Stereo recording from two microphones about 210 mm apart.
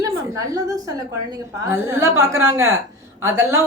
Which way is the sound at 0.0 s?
15° right (ahead or behind).